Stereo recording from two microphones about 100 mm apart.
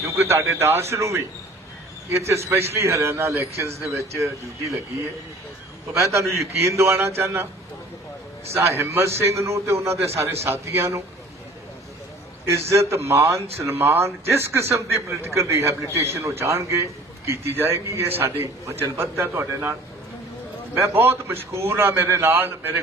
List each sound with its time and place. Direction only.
0.0 s speech: 30° right (ahead or behind)
6.0 s speech: 30° right (ahead or behind)
8.4 s speech: 25° right (ahead or behind)
12.5 s speech: 30° right (ahead or behind)
20.7 s speech: 25° right (ahead or behind)